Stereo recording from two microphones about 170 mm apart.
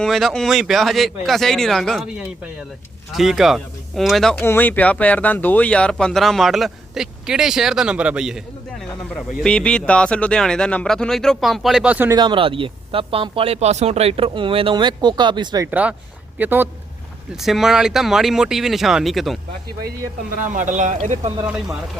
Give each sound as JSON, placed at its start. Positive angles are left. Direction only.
{"t": 0.0, "sound": "speech", "side_deg": 0}
{"t": 8.9, "sound": "speech", "side_deg": 5}
{"t": 12.1, "sound": "speech", "side_deg": -30}
{"t": 15.6, "sound": "speech", "side_deg": -10}
{"t": 20.4, "sound": "speech", "side_deg": -50}
{"t": 21.4, "sound": "speech", "side_deg": -5}